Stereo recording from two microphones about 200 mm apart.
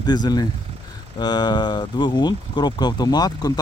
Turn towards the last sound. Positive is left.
turn(degrees=20)  # may be behind; listen again after turning